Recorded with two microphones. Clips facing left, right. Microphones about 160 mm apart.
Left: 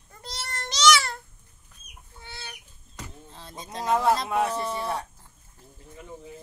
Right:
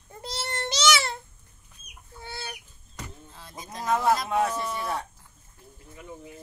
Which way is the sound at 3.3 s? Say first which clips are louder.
Left 3 dB; 30° left (ahead or behind).